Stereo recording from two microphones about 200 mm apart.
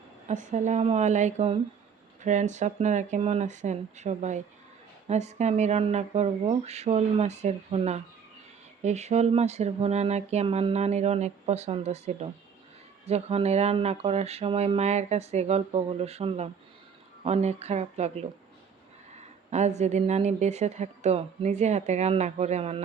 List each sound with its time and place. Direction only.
0.3 s speech: 35° right (ahead or behind)